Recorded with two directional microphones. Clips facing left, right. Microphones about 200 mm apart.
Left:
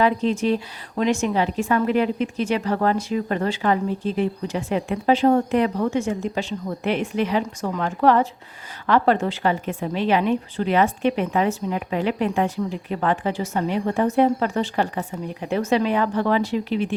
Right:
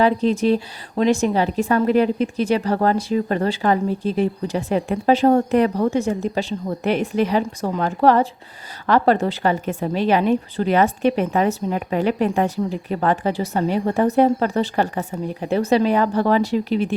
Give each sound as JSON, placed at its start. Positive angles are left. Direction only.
{"t": 0.0, "sound": "a woman's voice", "side_deg": -40}